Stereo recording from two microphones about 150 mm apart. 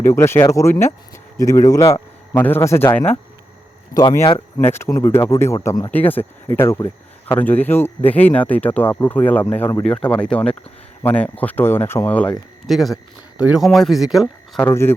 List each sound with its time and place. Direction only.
0.0 s speech: 15° left (ahead or behind)
4.2 s speech: 35° left (ahead or behind)
4.5 s speech: 15° left (ahead or behind)
5.9 s speech: 10° left (ahead or behind)
14.6 s speech: 15° left (ahead or behind)